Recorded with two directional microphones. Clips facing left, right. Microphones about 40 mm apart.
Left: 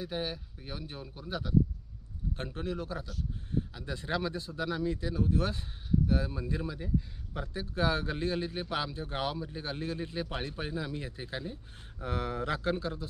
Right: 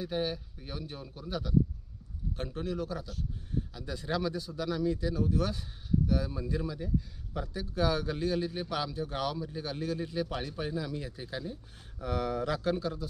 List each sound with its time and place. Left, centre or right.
0.0 s speech: centre
2.3 s speech: left